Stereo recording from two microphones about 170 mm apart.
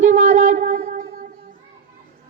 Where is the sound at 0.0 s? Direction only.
45° right (ahead or behind).